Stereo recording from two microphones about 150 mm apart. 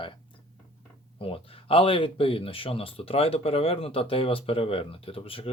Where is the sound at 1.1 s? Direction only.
40° left (ahead or behind).